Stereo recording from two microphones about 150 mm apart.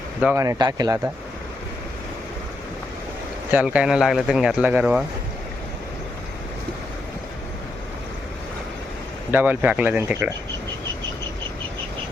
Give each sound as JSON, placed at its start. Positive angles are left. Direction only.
{"t": 0.3, "sound": "speech", "side_deg": -25}
{"t": 3.5, "sound": "speech", "side_deg": -10}
{"t": 9.3, "sound": "speech", "side_deg": -10}